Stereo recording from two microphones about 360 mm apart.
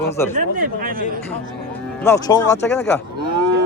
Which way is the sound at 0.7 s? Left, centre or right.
Right.